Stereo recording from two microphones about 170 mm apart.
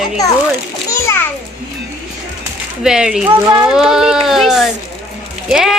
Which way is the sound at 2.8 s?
5° right (ahead or behind).